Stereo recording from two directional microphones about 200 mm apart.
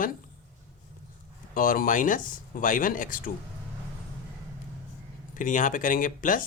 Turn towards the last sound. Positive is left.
turn(degrees=40)  # may be behind; listen again after turning